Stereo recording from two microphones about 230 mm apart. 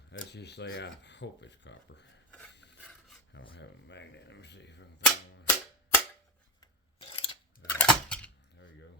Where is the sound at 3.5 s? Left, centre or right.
Left.